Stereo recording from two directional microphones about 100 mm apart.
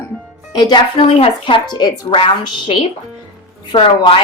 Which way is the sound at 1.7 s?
50° left (ahead or behind).